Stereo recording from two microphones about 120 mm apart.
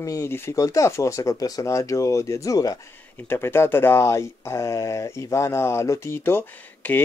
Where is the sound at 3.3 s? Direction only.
20° left (ahead or behind).